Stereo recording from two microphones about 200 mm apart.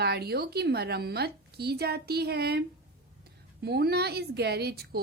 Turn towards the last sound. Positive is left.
turn(degrees=-50)  # may be behind; listen again after turning